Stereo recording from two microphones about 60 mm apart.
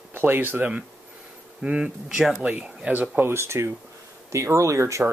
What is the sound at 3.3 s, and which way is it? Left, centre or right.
Speech, right.